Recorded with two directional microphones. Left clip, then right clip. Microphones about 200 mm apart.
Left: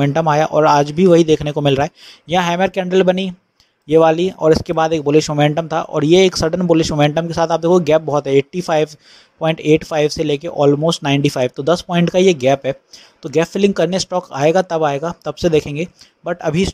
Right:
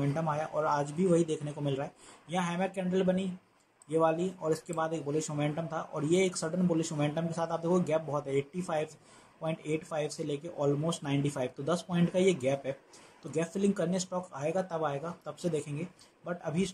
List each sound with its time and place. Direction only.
0.0 s speech: 40° left (ahead or behind)